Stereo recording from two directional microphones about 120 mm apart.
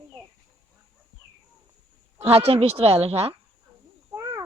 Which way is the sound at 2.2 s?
55° right (ahead or behind).